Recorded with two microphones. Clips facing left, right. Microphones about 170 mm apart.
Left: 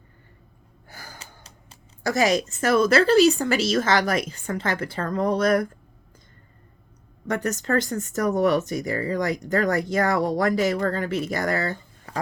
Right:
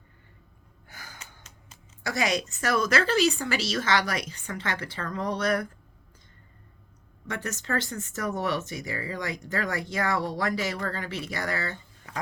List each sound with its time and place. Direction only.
0.9 s a sound: 40° left (ahead or behind)
2.6 s speech: 30° left (ahead or behind)
7.4 s speech: 40° left (ahead or behind)